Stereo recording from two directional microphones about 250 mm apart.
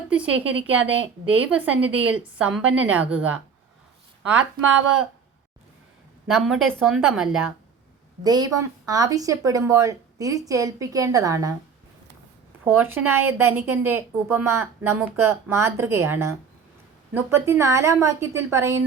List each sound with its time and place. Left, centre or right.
1.3 s a woman's voice: centre
4.6 s speech: right
6.2 s a woman's voice: centre
8.2 s a woman's voice: centre
12.6 s a woman's voice: centre